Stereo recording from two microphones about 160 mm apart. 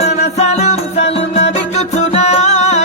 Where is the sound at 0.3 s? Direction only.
45° left (ahead or behind).